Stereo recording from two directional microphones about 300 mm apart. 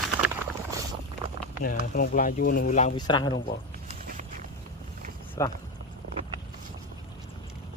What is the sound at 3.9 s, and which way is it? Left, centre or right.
Walk, right.